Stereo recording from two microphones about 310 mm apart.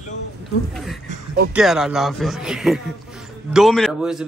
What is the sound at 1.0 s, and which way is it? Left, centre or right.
Speech, right.